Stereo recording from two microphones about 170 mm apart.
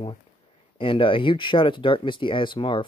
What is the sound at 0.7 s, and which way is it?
Speech, 30° left (ahead or behind).